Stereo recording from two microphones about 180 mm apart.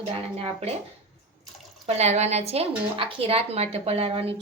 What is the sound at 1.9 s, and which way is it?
A woman's voice, 40° right (ahead or behind).